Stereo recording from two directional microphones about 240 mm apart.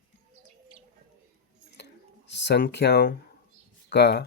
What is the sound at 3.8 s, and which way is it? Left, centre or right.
Speech, left.